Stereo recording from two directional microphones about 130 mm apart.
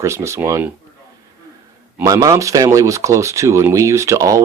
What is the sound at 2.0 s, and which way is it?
Speech, 25° right (ahead or behind).